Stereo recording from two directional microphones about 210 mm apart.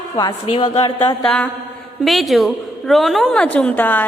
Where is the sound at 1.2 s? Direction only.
5° left (ahead or behind).